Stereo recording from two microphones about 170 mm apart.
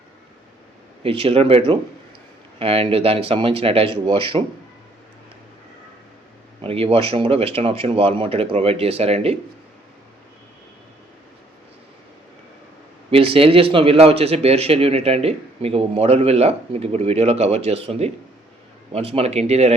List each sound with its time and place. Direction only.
1.0 s a man's voice: 35° right (ahead or behind)
6.6 s a man's voice: 35° right (ahead or behind)
13.1 s a man's voice: 35° right (ahead or behind)